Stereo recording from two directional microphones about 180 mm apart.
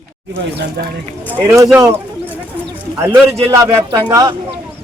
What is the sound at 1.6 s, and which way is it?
Speech, 10° right (ahead or behind).